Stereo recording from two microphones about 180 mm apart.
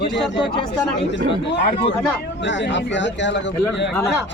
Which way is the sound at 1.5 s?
70° left (ahead or behind).